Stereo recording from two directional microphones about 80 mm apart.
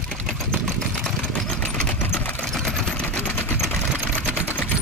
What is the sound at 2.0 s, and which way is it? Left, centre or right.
Sewing machine, left.